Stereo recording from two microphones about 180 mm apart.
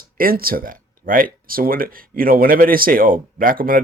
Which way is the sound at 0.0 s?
55° right (ahead or behind).